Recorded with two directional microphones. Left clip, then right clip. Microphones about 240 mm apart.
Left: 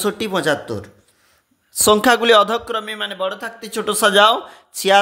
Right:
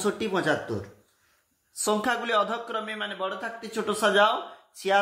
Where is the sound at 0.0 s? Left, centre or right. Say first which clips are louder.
Left 7 dB; left.